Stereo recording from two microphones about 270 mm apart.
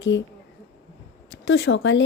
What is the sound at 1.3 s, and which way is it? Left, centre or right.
Speech, left.